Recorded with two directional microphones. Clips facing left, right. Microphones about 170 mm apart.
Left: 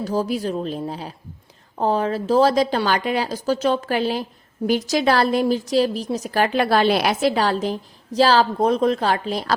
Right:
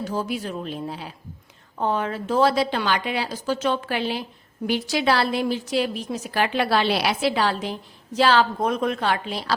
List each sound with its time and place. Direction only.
0.0 s speech: 35° left (ahead or behind)